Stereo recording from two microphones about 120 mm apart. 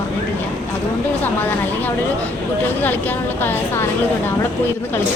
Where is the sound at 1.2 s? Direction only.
15° left (ahead or behind).